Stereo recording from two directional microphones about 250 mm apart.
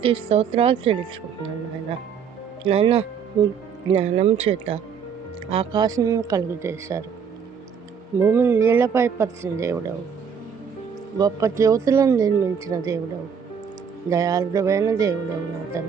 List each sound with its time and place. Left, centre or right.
0.0 s a woman's voice: right
2.6 s a woman's voice: right
8.2 s speech: centre
11.2 s speech: centre
14.1 s speech: centre